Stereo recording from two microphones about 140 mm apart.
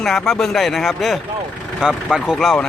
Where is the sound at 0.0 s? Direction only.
5° left (ahead or behind).